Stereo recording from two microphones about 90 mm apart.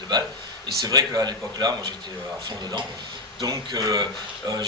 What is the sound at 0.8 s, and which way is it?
Speech, 45° right (ahead or behind).